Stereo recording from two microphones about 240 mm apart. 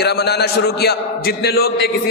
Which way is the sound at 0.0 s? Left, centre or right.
Left.